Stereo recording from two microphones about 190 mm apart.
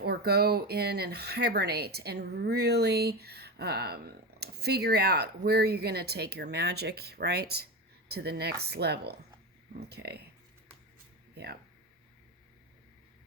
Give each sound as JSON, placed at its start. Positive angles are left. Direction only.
{"t": 0.0, "sound": "speech", "side_deg": -55}